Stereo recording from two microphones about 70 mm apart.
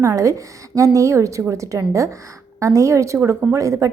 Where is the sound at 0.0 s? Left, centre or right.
Right.